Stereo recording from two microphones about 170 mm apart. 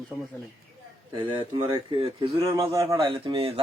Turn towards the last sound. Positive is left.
turn(degrees=-35)  # may be behind; listen again after turning